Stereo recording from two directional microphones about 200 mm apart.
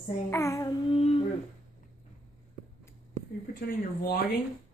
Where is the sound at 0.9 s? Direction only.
30° left (ahead or behind).